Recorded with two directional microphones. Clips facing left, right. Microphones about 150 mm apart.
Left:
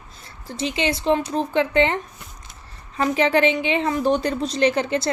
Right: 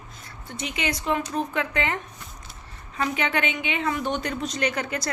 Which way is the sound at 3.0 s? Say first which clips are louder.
Left 7 dB; 35° left (ahead or behind).